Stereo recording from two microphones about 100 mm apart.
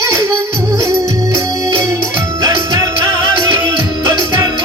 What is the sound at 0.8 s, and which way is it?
Organ, 30° right (ahead or behind).